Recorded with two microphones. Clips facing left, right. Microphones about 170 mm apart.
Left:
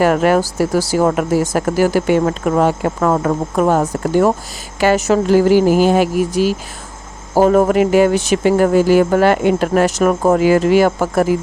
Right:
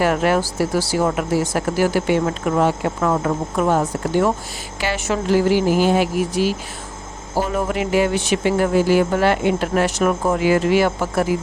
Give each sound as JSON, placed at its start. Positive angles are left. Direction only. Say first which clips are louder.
{"t": 0.0, "sound": "speech", "louder": "left 5 dB", "side_deg": 45}